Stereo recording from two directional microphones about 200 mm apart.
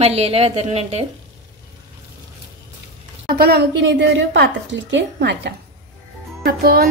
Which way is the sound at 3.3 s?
55° right (ahead or behind).